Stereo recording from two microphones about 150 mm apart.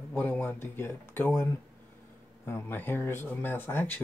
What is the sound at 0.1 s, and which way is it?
Speech, 10° left (ahead or behind).